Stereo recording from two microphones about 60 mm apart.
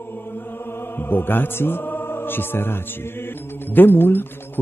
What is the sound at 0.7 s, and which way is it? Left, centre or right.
Mantra, left.